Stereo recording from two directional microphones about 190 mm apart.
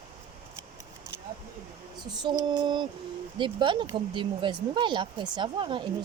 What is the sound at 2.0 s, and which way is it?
Speech, 20° right (ahead or behind).